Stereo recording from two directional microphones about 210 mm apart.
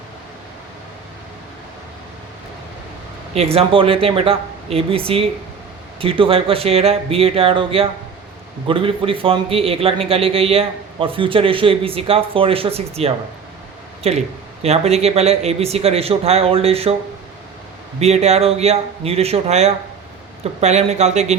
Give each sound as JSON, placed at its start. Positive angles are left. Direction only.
{"t": 3.3, "sound": "a man's voice", "side_deg": -30}
{"t": 18.0, "sound": "a man's voice", "side_deg": -30}